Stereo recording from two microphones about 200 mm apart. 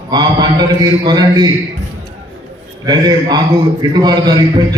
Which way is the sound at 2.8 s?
20° right (ahead or behind).